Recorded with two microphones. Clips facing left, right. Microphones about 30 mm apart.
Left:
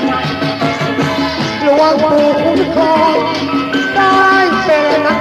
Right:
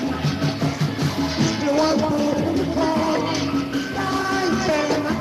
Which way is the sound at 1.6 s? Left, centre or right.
Left.